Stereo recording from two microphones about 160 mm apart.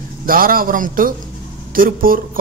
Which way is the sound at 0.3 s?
65° right (ahead or behind).